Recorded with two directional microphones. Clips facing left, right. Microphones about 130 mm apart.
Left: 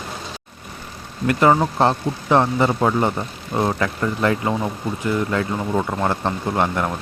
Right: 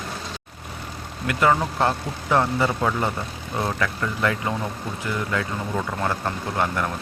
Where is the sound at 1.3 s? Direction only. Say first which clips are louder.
Left 4 dB; 30° left (ahead or behind).